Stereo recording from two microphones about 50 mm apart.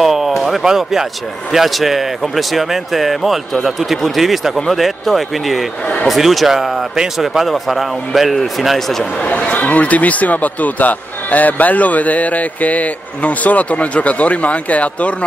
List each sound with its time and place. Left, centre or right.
0.0 s a sound: centre
1.5 s speech: centre
9.2 s a man's voice: left